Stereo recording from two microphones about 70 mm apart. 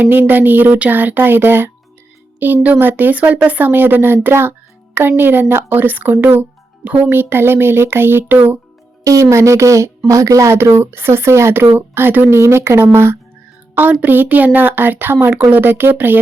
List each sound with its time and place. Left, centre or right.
0.0 s speech: right
7.1 s speech: right
9.0 s speech: right
13.7 s speech: right